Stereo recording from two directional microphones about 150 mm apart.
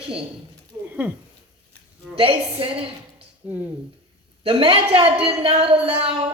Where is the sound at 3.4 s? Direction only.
10° right (ahead or behind).